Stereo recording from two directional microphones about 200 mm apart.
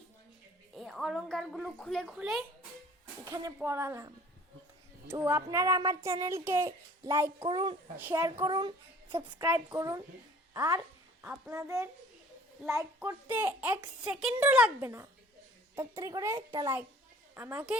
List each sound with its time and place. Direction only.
0.7 s a woman's voice: centre (ahead or behind)
3.2 s a child's voice: 20° right (ahead or behind)
7.9 s speech: 10° right (ahead or behind)
8.2 s a child's voice: 20° right (ahead or behind)
9.4 s speech: 10° right (ahead or behind)
11.2 s speech: 5° right (ahead or behind)